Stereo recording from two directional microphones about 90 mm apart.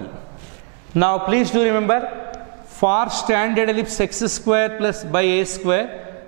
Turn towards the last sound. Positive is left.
turn(degrees=-10)  # may be behind; listen again after turning